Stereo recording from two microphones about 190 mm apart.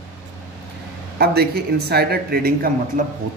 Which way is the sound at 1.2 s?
55° right (ahead or behind).